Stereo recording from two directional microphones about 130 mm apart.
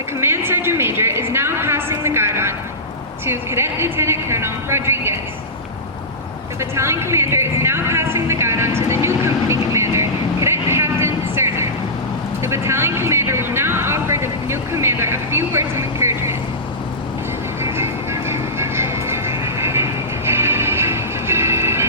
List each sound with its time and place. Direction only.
0.2 s a sound: 20° right (ahead or behind)
3.2 s a woman's voice: 20° right (ahead or behind)
6.6 s speech: 20° right (ahead or behind)
12.4 s vehicle: 20° right (ahead or behind)
17.6 s music: 20° right (ahead or behind)